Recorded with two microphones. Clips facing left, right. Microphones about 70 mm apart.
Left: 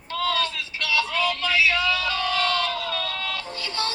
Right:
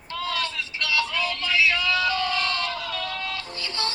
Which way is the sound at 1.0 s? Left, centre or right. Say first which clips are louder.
Left 3 dB; left.